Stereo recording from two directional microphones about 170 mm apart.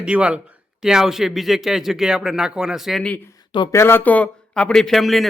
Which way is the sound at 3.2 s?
25° left (ahead or behind).